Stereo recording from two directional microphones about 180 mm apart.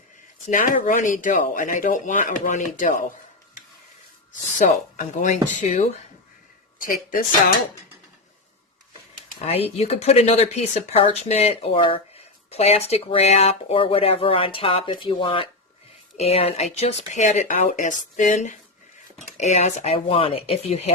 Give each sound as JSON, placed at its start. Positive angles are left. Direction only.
{"t": 0.5, "sound": "speech", "side_deg": 50}
{"t": 4.5, "sound": "speech", "side_deg": 45}
{"t": 9.5, "sound": "speech", "side_deg": 35}